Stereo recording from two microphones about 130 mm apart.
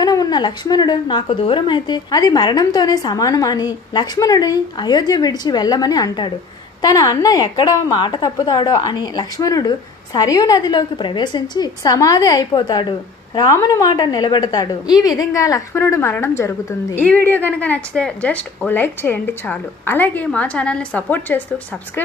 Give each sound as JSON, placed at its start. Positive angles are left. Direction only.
{"t": 0.0, "sound": "a woman's voice", "side_deg": 30}